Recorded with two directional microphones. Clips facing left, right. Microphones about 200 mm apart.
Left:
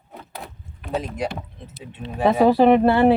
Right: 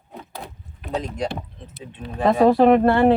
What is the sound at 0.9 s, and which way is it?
Speech, 5° left (ahead or behind).